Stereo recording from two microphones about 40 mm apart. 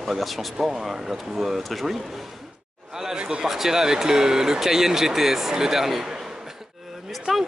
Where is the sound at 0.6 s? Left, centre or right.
Centre.